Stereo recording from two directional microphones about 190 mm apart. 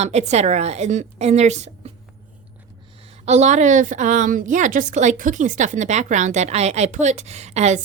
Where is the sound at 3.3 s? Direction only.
40° right (ahead or behind).